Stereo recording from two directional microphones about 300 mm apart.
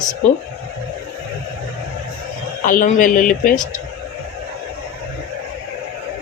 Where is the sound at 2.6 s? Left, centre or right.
Left.